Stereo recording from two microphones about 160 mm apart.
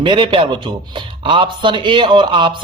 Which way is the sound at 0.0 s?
30° right (ahead or behind).